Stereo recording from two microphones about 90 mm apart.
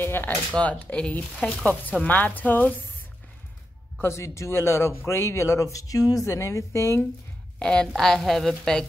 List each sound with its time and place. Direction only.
0.0 s a sound: 25° left (ahead or behind)
0.6 s speech: 15° left (ahead or behind)
4.0 s speech: 30° left (ahead or behind)
7.5 s a woman's voice: 10° left (ahead or behind)